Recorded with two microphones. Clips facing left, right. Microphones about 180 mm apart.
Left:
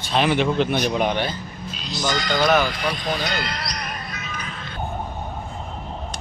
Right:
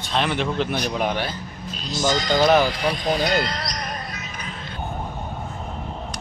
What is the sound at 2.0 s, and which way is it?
Speech, 25° right (ahead or behind).